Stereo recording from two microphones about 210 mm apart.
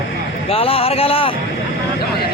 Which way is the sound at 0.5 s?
25° left (ahead or behind).